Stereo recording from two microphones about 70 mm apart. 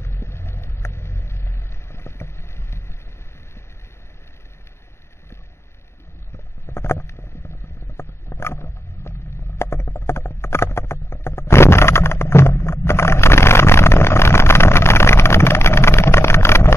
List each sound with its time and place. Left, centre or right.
0.0 s vehicle: left
6.3 s a sound: left
9.6 s clip-clop: left